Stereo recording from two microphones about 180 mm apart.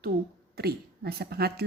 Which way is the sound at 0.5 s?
60° right (ahead or behind).